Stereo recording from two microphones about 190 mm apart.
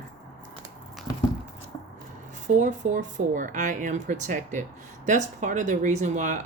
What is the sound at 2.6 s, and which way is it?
Speech, 45° right (ahead or behind).